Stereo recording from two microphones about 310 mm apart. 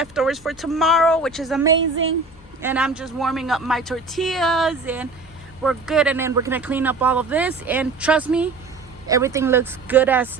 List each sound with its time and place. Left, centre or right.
0.0 s speech: centre
1.7 s a woman's voice: right
2.6 s speech: centre